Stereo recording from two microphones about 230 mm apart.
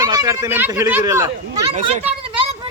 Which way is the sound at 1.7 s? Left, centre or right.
Right.